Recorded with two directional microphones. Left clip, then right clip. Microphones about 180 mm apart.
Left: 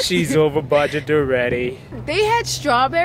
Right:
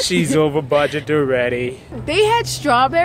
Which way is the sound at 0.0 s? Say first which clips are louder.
Even; 5° left (ahead or behind).